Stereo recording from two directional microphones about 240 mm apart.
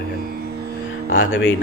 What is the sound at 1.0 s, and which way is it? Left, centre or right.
Speech, left.